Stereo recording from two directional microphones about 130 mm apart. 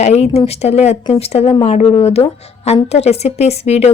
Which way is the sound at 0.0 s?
55° left (ahead or behind).